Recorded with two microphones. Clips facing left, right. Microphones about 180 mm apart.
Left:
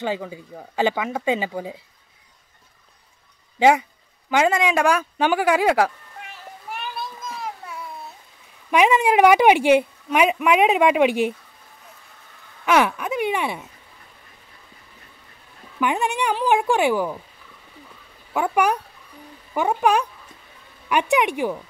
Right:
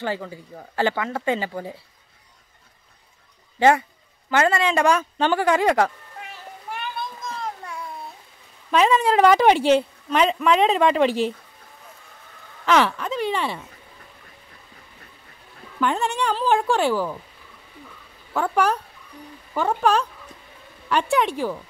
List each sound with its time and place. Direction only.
0.0 s a woman's voice: 15° left (ahead or behind)
3.5 s a woman's voice: 15° left (ahead or behind)
7.0 s children playing: 5° left (ahead or behind)
8.6 s a woman's voice: 10° left (ahead or behind)
12.6 s speech: 10° left (ahead or behind)
15.8 s a woman's voice: 15° left (ahead or behind)
18.3 s a woman's voice: 10° left (ahead or behind)